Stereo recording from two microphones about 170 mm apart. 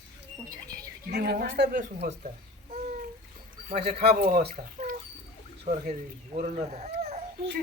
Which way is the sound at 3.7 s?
60° right (ahead or behind).